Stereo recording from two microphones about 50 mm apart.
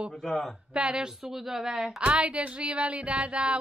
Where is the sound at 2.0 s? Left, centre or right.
Right.